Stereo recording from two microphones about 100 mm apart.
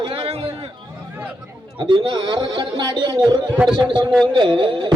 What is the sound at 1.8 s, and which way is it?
A man's voice, 55° right (ahead or behind).